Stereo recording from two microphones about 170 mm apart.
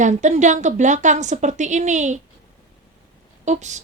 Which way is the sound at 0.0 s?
45° right (ahead or behind).